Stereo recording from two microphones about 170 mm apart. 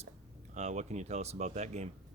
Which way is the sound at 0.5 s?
40° right (ahead or behind).